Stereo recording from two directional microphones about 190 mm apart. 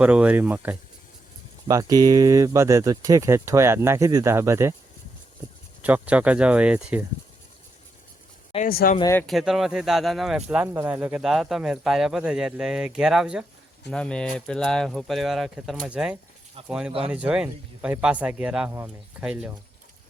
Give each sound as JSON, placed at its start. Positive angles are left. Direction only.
{"t": 0.0, "sound": "speech", "side_deg": -5}
{"t": 1.6, "sound": "speech", "side_deg": -20}
{"t": 5.8, "sound": "speech", "side_deg": -5}
{"t": 8.5, "sound": "speech", "side_deg": 50}
{"t": 9.0, "sound": "speech", "side_deg": 15}
{"t": 9.2, "sound": "speech", "side_deg": 0}